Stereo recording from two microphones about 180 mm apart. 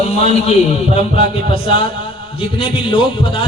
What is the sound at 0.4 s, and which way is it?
A man's voice, 35° left (ahead or behind).